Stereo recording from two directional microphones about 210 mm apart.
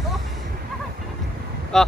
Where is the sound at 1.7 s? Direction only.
Centre (ahead or behind).